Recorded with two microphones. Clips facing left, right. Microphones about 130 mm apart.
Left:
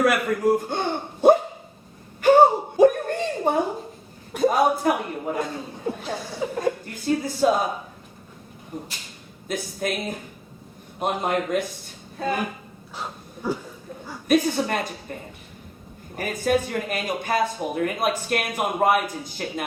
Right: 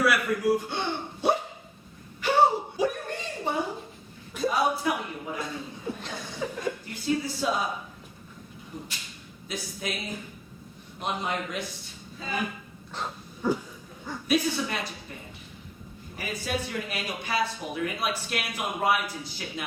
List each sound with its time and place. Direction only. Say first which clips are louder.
0.0 s a man's voice: left 4 dB; 45° left (ahead or behind)
2.2 s a sound: left 7 dB; 50° left (ahead or behind)
4.3 s speech: left 6 dB; 50° left (ahead or behind)
8.7 s speech: left 5 dB; 50° left (ahead or behind)
13.0 s dog: even; 10° left (ahead or behind)
14.3 s speech: left 6 dB; 50° left (ahead or behind)